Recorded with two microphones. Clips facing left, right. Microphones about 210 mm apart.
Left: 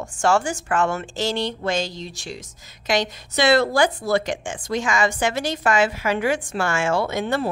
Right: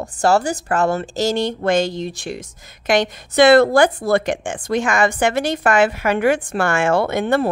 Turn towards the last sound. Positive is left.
turn(degrees=-55)  # may be behind; listen again after turning